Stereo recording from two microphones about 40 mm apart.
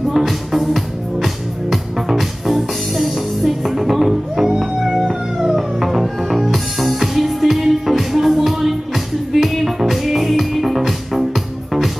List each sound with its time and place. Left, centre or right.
0.1 s music: centre